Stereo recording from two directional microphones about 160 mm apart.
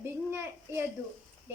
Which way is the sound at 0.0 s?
15° right (ahead or behind).